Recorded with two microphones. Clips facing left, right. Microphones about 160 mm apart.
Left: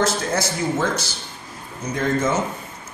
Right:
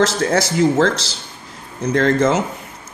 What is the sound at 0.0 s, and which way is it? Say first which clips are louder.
A man's voice: right 5 dB; 85° right.